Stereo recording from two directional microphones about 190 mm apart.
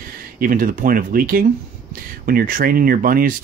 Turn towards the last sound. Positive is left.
turn(degrees=-50)  # may be behind; listen again after turning